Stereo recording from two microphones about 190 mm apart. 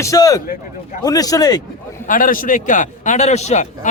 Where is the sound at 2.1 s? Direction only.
45° left (ahead or behind).